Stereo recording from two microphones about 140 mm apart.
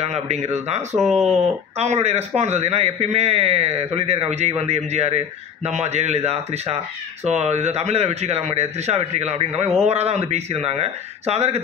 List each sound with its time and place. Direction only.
0.0 s a man's voice: 50° right (ahead or behind)